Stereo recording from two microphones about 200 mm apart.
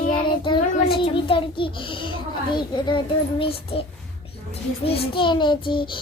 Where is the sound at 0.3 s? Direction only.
25° left (ahead or behind).